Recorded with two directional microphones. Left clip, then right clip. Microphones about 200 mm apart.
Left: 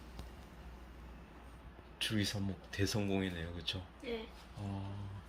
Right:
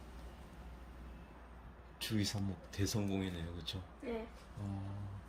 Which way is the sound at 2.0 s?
Centre (ahead or behind).